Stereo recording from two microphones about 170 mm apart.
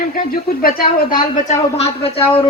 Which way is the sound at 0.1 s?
60° left (ahead or behind).